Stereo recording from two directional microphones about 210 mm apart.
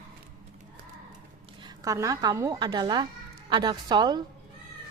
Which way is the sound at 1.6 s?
15° right (ahead or behind).